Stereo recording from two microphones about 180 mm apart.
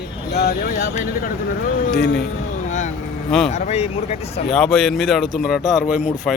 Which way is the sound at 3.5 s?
40° left (ahead or behind).